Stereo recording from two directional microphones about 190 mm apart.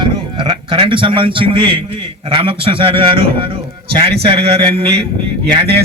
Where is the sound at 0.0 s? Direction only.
25° right (ahead or behind).